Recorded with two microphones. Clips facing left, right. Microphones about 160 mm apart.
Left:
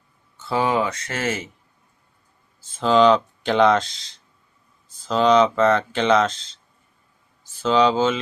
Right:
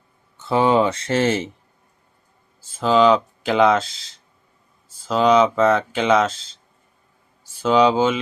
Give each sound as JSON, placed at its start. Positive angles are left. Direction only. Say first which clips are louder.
{"t": 0.3, "sound": "speech", "louder": "right 4 dB", "side_deg": -20}
{"t": 2.6, "sound": "speech", "louder": "even", "side_deg": -5}
{"t": 7.4, "sound": "speech", "louder": "right 2 dB", "side_deg": -10}